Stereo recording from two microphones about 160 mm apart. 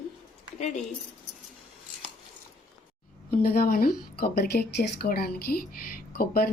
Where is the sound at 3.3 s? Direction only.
65° left (ahead or behind).